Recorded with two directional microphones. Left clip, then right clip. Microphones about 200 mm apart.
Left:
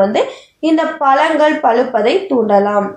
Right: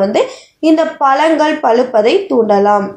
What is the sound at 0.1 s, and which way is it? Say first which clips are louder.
A woman's voice: right 2 dB; 45° right (ahead or behind).